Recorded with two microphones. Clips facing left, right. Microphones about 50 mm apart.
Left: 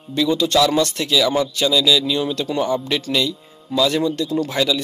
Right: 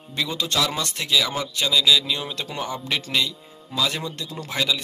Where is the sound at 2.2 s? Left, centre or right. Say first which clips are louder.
Left 9 dB; right.